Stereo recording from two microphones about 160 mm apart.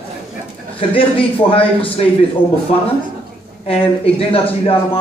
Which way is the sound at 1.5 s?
35° left (ahead or behind).